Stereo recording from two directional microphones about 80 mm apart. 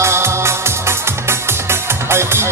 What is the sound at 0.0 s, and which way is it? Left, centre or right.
Music, right.